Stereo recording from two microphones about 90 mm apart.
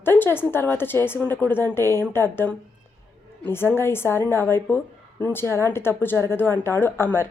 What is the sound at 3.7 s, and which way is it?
Speech, 25° left (ahead or behind).